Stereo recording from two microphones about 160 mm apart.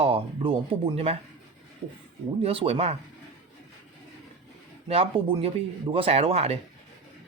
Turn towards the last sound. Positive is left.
turn(degrees=-40)  # may be behind; listen again after turning